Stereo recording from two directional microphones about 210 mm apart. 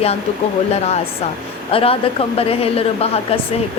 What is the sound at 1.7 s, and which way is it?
A woman's voice, 25° left (ahead or behind).